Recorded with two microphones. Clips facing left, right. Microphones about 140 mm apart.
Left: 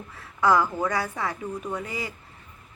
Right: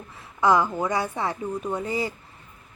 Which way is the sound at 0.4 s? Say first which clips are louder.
Right 1 dB; 20° right (ahead or behind).